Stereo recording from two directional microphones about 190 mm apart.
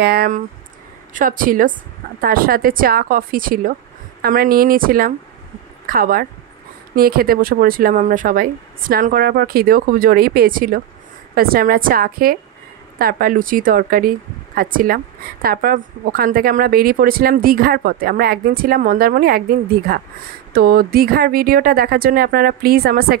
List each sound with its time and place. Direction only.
0.0 s a woman's voice: 55° right (ahead or behind)